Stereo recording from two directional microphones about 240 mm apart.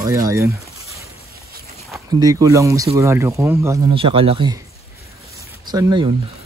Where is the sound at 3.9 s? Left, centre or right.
Right.